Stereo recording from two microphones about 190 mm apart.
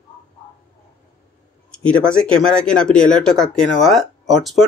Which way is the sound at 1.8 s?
5° left (ahead or behind).